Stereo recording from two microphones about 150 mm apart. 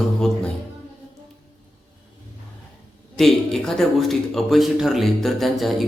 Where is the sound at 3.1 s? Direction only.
Centre (ahead or behind).